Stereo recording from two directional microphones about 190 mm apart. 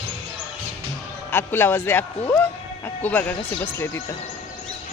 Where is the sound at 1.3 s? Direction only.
10° left (ahead or behind).